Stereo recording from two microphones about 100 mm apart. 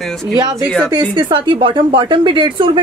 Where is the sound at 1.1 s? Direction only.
50° right (ahead or behind).